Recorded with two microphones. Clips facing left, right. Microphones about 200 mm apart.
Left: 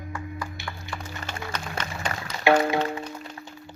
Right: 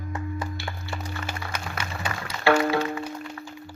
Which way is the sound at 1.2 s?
10° right (ahead or behind).